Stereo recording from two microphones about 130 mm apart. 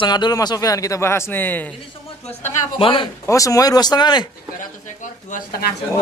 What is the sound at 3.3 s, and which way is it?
A man's voice, 25° left (ahead or behind).